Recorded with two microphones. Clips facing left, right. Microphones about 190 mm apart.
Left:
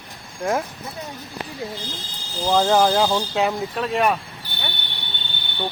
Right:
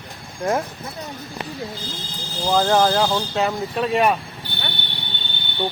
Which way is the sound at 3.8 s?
5° right (ahead or behind).